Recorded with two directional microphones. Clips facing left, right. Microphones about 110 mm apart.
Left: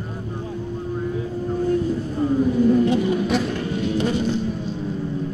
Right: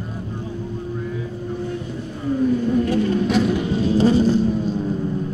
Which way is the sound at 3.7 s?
35° right (ahead or behind).